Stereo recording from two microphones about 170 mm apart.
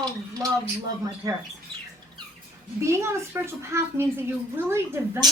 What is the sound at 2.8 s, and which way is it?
A woman's voice, 15° right (ahead or behind).